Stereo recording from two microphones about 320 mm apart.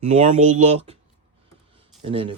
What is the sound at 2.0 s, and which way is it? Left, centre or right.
Speech, centre.